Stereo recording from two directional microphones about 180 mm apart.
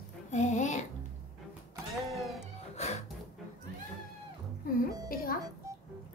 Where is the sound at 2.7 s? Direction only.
35° left (ahead or behind).